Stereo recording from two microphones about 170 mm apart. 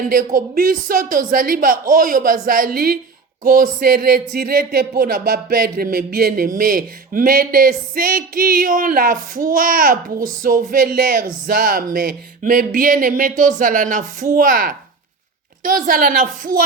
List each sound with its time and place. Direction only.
0.0 s speech: 55° right (ahead or behind)